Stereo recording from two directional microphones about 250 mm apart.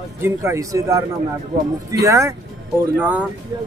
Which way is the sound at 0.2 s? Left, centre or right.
Centre.